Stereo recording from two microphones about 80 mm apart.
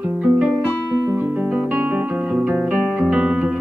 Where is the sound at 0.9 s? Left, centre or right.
Right.